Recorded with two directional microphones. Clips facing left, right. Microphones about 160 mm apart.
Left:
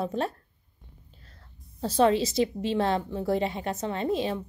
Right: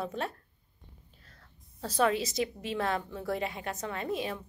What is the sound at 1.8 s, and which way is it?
A woman's voice, 30° left (ahead or behind).